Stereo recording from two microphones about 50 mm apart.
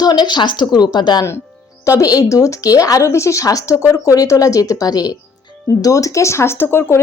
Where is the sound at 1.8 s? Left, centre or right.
Left.